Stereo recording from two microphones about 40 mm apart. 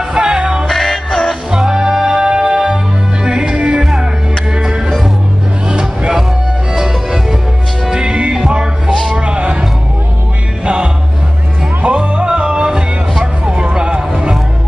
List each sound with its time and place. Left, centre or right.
0.1 s music: centre
0.7 s music: centre
1.5 s music: centre
7.9 s music: right